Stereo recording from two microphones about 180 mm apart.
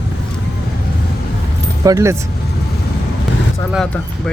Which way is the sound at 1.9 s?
15° right (ahead or behind).